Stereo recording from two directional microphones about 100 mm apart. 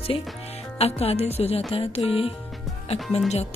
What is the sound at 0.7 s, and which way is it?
Speech, 90° left.